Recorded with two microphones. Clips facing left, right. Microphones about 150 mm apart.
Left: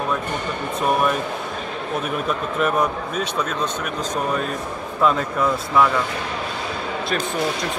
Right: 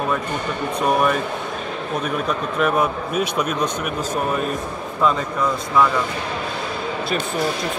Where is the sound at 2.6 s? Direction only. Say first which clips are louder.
Right 1 dB; centre (ahead or behind).